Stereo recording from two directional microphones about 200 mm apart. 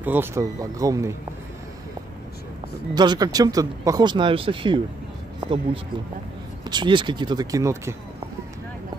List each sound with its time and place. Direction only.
0.0 s speech: 10° right (ahead or behind)
2.9 s speech: 20° right (ahead or behind)
6.7 s speech: 25° right (ahead or behind)